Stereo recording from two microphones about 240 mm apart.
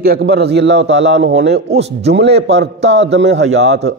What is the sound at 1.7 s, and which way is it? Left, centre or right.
Speech, right.